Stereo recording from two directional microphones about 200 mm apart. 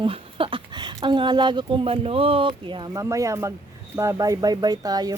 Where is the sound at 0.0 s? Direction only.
25° right (ahead or behind).